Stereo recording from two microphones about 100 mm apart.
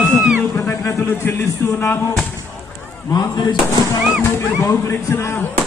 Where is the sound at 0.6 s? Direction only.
25° left (ahead or behind).